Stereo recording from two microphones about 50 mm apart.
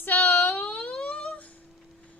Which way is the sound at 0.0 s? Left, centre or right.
Left.